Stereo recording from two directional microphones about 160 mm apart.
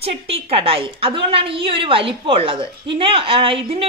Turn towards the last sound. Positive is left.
turn(degrees=-35)  # may be behind; listen again after turning